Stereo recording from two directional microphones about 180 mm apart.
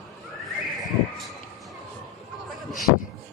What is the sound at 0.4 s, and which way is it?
Horse, centre (ahead or behind).